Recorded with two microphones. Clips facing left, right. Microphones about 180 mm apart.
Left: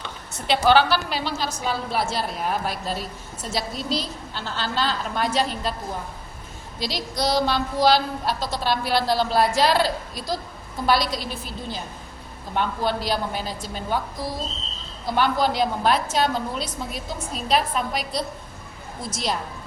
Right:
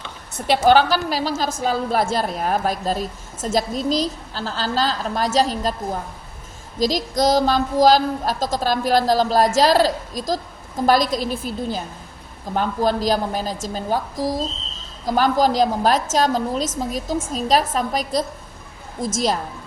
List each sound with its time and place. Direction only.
0.3 s a woman's voice: 45° right (ahead or behind)
12.5 s a woman's voice: 40° right (ahead or behind)